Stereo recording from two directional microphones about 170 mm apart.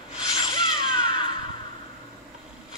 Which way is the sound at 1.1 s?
30° left (ahead or behind).